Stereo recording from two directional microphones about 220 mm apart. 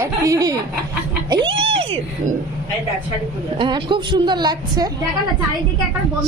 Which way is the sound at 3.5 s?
20° right (ahead or behind).